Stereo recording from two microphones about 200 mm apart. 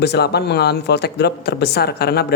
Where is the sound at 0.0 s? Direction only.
55° left (ahead or behind).